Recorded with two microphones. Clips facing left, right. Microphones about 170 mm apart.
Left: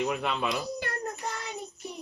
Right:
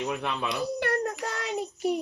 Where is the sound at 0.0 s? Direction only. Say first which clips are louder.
Left 1 dB; 10° left (ahead or behind).